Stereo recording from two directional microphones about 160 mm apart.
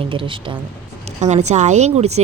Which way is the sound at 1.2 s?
45° right (ahead or behind).